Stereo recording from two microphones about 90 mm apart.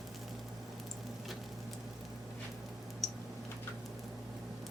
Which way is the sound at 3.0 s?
Centre (ahead or behind).